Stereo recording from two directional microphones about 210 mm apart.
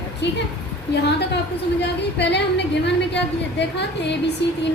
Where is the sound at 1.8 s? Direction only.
55° left (ahead or behind).